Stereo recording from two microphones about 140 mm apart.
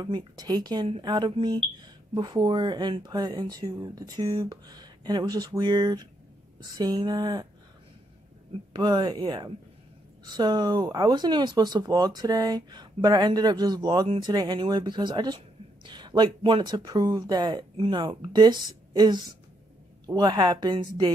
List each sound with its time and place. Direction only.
0.0 s speech: 30° right (ahead or behind)
8.7 s speech: 30° right (ahead or behind)